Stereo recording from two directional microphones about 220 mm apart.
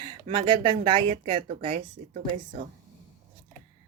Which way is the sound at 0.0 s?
20° right (ahead or behind).